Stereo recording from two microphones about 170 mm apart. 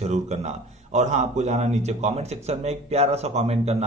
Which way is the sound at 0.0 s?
40° right (ahead or behind).